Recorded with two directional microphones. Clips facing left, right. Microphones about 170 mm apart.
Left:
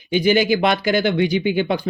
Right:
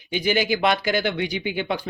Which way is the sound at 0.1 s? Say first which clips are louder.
Left 6 dB; 25° left (ahead or behind).